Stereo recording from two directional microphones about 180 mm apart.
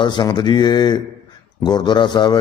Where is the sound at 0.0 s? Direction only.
25° left (ahead or behind).